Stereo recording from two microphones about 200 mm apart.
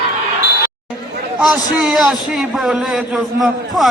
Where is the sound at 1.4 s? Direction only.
Centre (ahead or behind).